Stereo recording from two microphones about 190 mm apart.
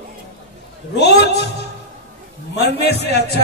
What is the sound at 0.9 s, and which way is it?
Speech, 60° left (ahead or behind).